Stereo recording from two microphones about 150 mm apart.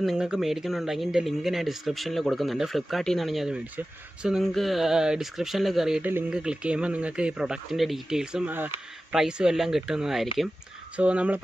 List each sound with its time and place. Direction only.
0.0 s speech: 5° right (ahead or behind)